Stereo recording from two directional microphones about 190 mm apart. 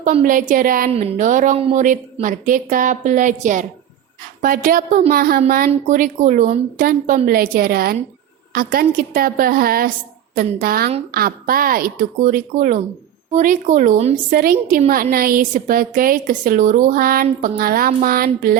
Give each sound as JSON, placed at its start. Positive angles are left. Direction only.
{"t": 0.0, "sound": "a woman's voice", "side_deg": -45}